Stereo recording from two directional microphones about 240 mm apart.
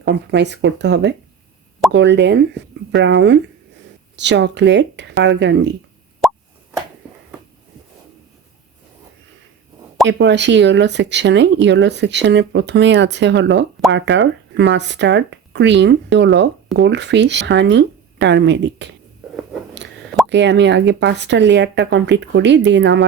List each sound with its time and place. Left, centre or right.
0.0 s speech: right
6.2 s plop: centre
10.1 s speech: right
20.3 s speech: right